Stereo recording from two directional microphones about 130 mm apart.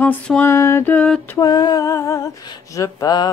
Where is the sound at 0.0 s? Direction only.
15° left (ahead or behind).